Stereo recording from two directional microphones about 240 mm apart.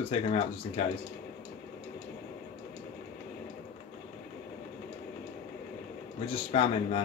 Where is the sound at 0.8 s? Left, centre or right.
Left.